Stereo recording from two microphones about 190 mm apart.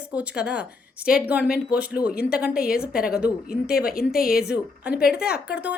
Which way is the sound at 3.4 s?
55° left (ahead or behind).